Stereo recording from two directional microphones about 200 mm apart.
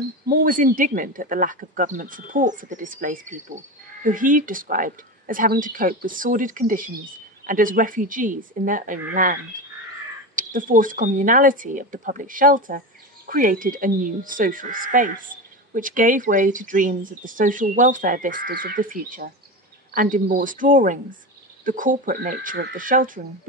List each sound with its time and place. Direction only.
0.3 s speech: 45° right (ahead or behind)